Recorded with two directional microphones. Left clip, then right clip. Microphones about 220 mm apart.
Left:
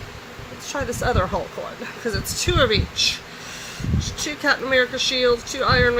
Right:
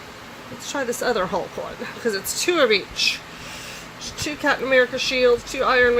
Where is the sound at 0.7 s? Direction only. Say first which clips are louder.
Right 1 dB; 25° right (ahead or behind).